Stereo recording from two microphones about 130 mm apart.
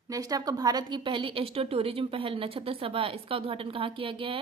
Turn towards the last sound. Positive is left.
turn(degrees=-45)  # may be behind; listen again after turning